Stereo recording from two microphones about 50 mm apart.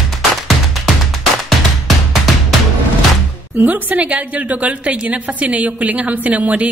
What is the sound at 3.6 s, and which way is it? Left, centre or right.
A woman's voice, right.